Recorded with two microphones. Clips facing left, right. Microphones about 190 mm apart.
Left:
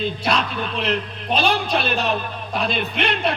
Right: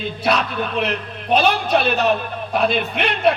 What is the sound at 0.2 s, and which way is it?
A man's voice, 60° right (ahead or behind).